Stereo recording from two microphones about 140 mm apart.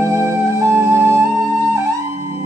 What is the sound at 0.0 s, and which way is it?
Music, 20° right (ahead or behind).